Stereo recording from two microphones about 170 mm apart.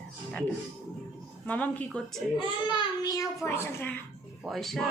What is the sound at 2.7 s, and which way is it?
A child's voice, 25° left (ahead or behind).